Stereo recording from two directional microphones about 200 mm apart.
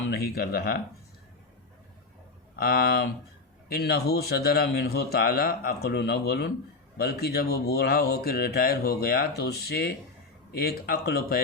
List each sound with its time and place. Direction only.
0.1 s speech: 50° left (ahead or behind)
2.6 s speech: 50° left (ahead or behind)